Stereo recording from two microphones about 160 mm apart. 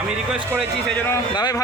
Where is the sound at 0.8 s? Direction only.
5° left (ahead or behind).